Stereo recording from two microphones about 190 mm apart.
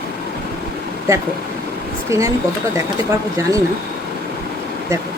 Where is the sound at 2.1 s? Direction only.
15° right (ahead or behind).